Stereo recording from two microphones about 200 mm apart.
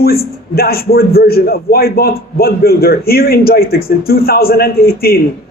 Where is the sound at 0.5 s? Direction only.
50° left (ahead or behind).